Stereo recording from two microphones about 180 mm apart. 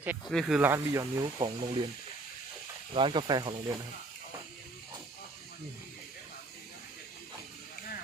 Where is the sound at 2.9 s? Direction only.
25° right (ahead or behind).